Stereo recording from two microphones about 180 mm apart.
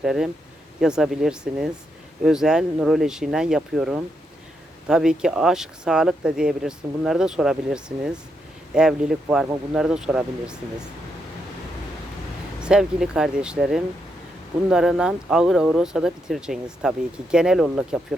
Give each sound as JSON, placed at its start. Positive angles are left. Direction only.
{"t": 0.0, "sound": "speech", "side_deg": -5}
{"t": 12.5, "sound": "speech", "side_deg": -5}